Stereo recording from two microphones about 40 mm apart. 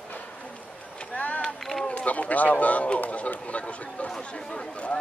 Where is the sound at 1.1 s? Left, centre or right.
Left.